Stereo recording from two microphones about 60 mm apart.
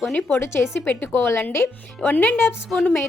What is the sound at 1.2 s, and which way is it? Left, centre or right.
Speech, left.